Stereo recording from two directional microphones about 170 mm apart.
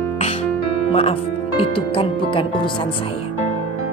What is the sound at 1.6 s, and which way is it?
Speech, 30° left (ahead or behind).